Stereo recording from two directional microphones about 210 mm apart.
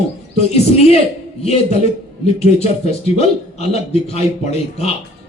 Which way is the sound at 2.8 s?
30° left (ahead or behind).